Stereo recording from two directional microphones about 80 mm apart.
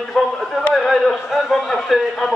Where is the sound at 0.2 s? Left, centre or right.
Centre.